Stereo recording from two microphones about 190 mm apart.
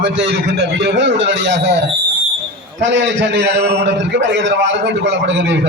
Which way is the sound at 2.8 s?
70° right (ahead or behind).